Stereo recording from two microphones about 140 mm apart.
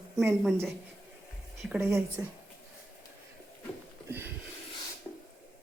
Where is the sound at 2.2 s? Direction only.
20° right (ahead or behind).